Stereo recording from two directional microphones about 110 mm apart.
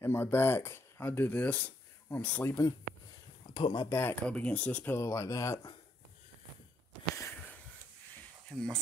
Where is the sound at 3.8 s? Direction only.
20° left (ahead or behind).